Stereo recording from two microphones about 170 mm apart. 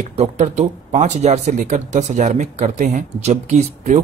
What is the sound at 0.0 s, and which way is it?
Speech, 40° right (ahead or behind).